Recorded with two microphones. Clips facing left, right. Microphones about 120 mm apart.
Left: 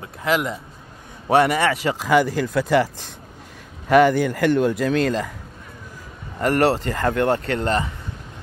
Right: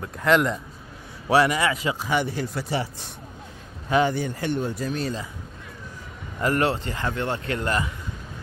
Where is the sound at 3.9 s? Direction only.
80° left.